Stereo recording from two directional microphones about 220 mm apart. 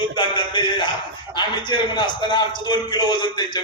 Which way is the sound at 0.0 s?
20° left (ahead or behind).